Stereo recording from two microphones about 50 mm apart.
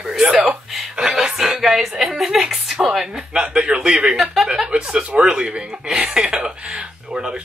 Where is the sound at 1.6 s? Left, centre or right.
Centre; by 6.3 s right.